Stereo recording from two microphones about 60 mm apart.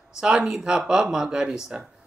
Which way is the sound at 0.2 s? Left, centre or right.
Centre.